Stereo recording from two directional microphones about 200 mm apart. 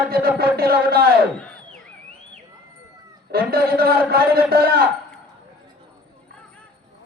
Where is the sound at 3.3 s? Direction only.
50° right (ahead or behind).